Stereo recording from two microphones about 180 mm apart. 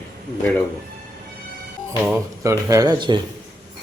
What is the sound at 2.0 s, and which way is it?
Speech, 15° right (ahead or behind).